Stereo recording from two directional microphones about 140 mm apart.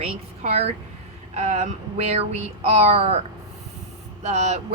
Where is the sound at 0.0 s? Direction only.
45° right (ahead or behind).